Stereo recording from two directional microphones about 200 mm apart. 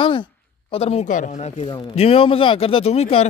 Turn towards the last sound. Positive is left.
turn(degrees=30)  # may be behind; listen again after turning